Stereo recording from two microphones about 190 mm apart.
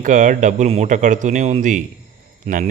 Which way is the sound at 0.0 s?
40° right (ahead or behind).